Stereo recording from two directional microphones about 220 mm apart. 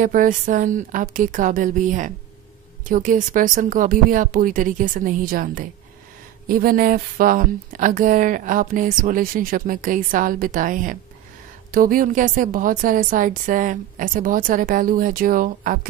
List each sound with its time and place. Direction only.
0.0 s speech: 35° right (ahead or behind)